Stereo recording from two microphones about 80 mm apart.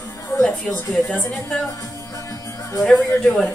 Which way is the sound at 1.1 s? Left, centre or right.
Left.